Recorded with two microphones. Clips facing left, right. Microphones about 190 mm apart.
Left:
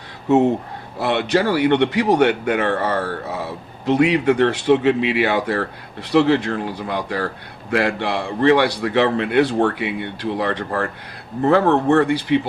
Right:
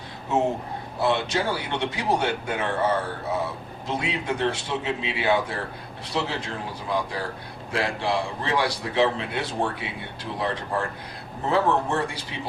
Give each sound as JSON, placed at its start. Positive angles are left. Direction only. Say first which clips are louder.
{"t": 1.0, "sound": "a man's voice", "louder": "left 6 dB", "side_deg": 65}